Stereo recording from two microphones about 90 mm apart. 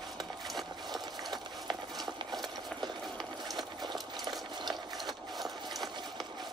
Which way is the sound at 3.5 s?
55° right (ahead or behind).